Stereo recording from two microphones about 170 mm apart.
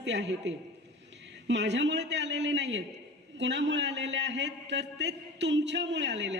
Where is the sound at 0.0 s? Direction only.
90° right.